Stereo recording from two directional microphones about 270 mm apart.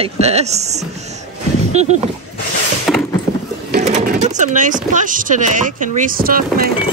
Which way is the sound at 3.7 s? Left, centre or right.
Right.